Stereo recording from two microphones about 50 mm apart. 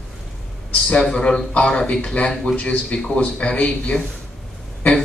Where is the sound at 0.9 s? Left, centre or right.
Centre.